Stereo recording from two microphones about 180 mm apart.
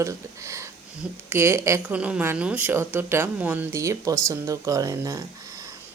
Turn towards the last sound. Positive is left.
turn(degrees=-20)  # may be behind; listen again after turning